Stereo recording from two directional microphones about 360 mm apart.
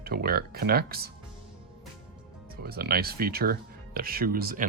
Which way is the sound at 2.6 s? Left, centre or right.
Right.